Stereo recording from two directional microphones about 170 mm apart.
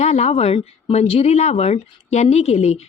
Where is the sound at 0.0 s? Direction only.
40° left (ahead or behind).